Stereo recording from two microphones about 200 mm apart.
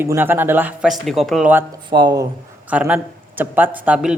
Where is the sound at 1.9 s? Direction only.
20° right (ahead or behind).